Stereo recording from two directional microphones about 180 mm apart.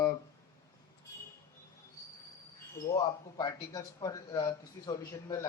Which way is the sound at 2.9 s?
20° left (ahead or behind).